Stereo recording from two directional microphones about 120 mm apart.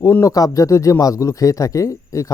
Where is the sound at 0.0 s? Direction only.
30° left (ahead or behind).